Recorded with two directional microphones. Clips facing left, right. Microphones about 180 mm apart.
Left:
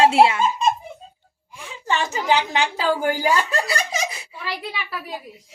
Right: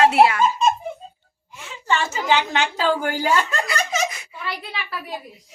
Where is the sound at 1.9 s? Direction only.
15° left (ahead or behind).